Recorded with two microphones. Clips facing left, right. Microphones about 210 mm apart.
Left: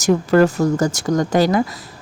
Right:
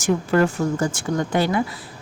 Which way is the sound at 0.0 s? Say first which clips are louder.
Left 5 dB; 40° left (ahead or behind).